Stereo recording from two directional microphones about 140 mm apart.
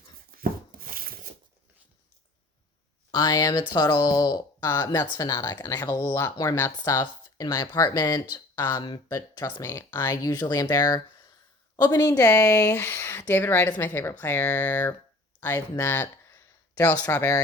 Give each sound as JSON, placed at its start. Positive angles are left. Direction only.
{"t": 0.3, "sound": "a sound", "side_deg": -90}
{"t": 3.1, "sound": "speech", "side_deg": 30}
{"t": 6.6, "sound": "a woman's voice", "side_deg": 15}
{"t": 6.9, "sound": "speech", "side_deg": 30}
{"t": 8.7, "sound": "a woman's voice", "side_deg": 30}
{"t": 15.9, "sound": "a sound", "side_deg": 15}
{"t": 17.0, "sound": "speech", "side_deg": 20}